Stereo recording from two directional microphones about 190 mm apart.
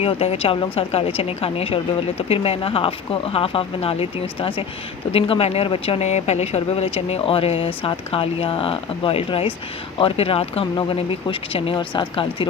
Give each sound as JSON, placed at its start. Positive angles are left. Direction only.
{"t": 0.0, "sound": "speech", "side_deg": 30}